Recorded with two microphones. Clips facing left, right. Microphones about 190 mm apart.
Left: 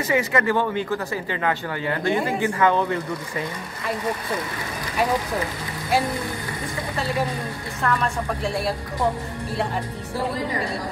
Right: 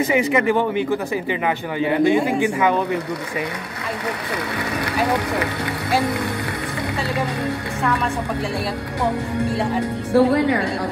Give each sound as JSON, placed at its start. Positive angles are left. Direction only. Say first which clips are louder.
{"t": 0.1, "sound": "speech", "louder": "even", "side_deg": -15}
{"t": 4.9, "sound": "speech", "louder": "right 1 dB", "side_deg": -70}
{"t": 10.1, "sound": "a woman's voice", "louder": "right 10 dB", "side_deg": -70}